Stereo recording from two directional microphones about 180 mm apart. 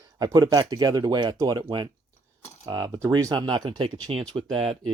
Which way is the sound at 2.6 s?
25° right (ahead or behind).